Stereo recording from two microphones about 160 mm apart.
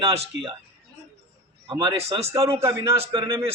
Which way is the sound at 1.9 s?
40° right (ahead or behind).